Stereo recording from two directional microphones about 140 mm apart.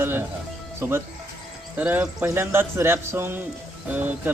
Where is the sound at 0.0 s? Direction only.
15° right (ahead or behind).